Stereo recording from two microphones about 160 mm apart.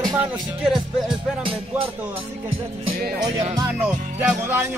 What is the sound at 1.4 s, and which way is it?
Music, 35° right (ahead or behind).